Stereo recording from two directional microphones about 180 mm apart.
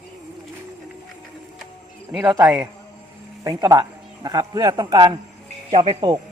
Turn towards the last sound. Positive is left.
turn(degrees=-25)  # may be behind; listen again after turning